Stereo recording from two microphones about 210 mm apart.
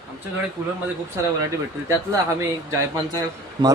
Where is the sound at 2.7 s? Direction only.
15° right (ahead or behind).